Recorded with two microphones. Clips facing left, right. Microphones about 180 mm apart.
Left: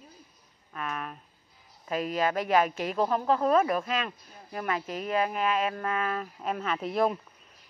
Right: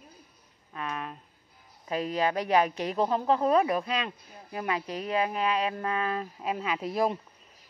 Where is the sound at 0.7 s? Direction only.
25° right (ahead or behind).